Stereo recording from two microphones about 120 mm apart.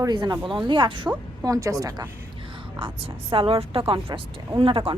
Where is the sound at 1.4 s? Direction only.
30° right (ahead or behind).